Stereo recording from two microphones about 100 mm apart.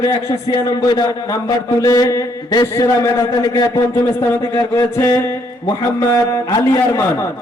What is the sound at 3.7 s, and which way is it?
A man's voice, 25° left (ahead or behind).